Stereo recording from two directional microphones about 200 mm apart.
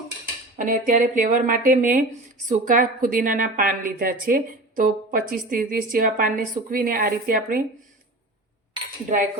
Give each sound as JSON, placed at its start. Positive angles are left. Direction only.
{"t": 0.5, "sound": "a woman's voice", "side_deg": -40}